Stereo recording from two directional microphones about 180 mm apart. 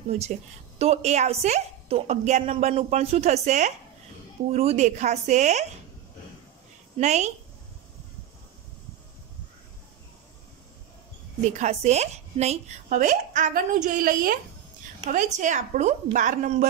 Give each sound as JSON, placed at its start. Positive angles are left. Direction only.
{"t": 0.7, "sound": "a woman's voice", "side_deg": -35}
{"t": 7.0, "sound": "a woman's voice", "side_deg": -40}
{"t": 11.4, "sound": "a woman's voice", "side_deg": -40}